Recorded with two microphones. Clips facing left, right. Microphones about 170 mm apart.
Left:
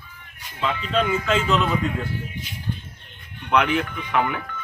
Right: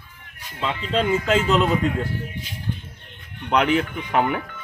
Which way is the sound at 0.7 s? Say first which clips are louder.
Right 1 dB; 35° right (ahead or behind).